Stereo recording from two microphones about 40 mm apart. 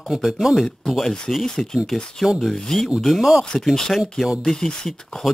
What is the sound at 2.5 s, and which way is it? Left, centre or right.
Speech, centre.